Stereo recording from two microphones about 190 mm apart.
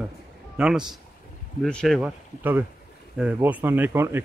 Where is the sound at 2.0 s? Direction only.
10° right (ahead or behind).